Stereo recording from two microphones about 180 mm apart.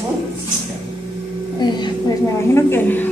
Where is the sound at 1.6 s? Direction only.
25° left (ahead or behind).